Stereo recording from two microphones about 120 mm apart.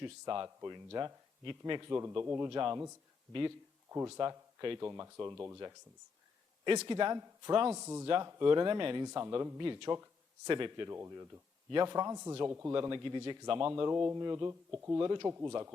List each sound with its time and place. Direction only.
0.0 s speech: 30° right (ahead or behind)
1.9 s speech: 25° right (ahead or behind)
3.8 s speech: 20° right (ahead or behind)
4.8 s speech: 20° right (ahead or behind)
6.7 s speech: 35° right (ahead or behind)
7.7 s speech: 20° right (ahead or behind)
8.0 s speech: 40° right (ahead or behind)
9.0 s speech: 25° right (ahead or behind)
9.6 s speech: 35° right (ahead or behind)
9.9 s a sound: 25° right (ahead or behind)
10.5 s speech: 40° right (ahead or behind)
10.8 s speech: 20° right (ahead or behind)
12.7 s speech: 35° right (ahead or behind)
13.6 s speech: 20° right (ahead or behind)